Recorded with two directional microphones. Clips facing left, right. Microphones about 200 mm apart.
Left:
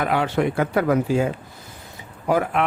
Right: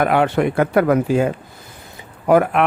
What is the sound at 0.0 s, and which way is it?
Speech, 55° right (ahead or behind).